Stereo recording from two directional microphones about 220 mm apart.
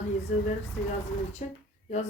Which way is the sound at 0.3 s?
35° left (ahead or behind).